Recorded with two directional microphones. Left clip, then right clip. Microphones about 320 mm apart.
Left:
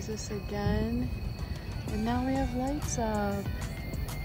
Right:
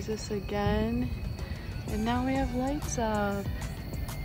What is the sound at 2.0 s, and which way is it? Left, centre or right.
Speech, centre.